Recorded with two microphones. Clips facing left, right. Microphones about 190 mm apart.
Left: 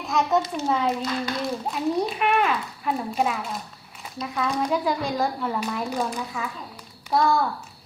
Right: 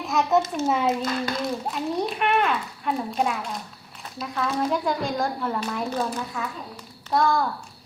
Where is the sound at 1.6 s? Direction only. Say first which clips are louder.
Left 2 dB; centre (ahead or behind).